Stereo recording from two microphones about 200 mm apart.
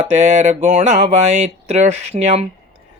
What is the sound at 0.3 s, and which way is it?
Mantra, 35° right (ahead or behind).